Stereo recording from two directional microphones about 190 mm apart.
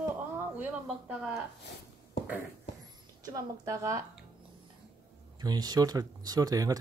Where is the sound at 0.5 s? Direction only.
5° right (ahead or behind).